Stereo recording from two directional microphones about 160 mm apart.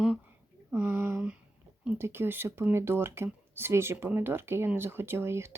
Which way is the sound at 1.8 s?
10° right (ahead or behind).